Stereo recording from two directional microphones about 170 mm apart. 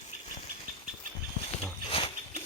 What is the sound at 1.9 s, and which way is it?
Wild animals, 35° left (ahead or behind).